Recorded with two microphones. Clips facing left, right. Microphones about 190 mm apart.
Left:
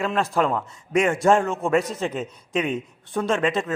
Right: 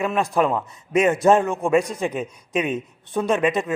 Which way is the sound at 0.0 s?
15° right (ahead or behind).